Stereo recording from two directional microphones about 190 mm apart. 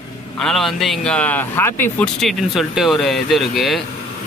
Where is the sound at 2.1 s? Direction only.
Centre (ahead or behind).